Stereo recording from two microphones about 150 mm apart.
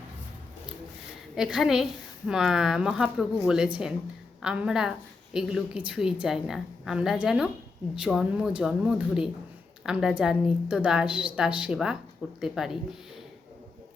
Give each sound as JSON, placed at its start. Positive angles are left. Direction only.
{"t": 1.4, "sound": "a woman's voice", "side_deg": -5}